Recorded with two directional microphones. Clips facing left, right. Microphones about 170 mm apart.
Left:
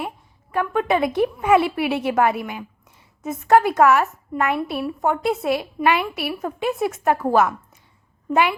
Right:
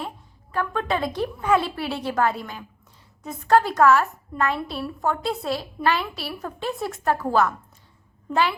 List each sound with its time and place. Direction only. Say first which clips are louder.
0.5 s a woman's voice: left 5 dB; 15° left (ahead or behind)
6.4 s a woman's voice: left 6 dB; 5° left (ahead or behind)
7.0 s a woman's voice: left 2 dB; 15° left (ahead or behind)